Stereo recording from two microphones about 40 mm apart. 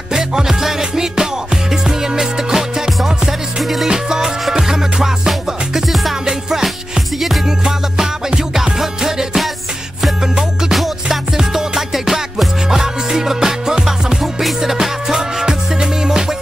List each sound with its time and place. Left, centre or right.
0.1 s music: centre
5.8 s music: centre
6.2 s music: centre
10.7 s music: centre